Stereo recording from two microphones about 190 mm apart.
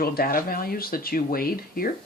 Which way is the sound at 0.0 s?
50° left (ahead or behind).